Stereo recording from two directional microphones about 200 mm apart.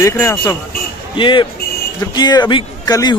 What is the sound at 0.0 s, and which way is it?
Speech, 15° left (ahead or behind).